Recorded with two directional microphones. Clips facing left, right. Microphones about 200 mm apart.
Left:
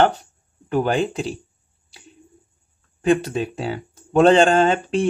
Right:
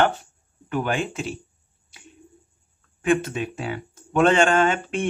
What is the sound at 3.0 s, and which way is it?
Speech, 35° left (ahead or behind).